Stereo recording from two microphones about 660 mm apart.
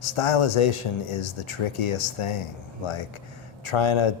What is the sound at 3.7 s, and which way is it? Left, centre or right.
Speech, left.